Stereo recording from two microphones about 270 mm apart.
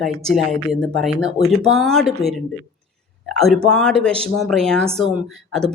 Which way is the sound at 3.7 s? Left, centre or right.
Centre.